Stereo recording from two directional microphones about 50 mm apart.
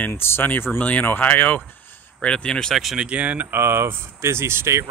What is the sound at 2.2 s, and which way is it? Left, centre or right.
Speech, centre.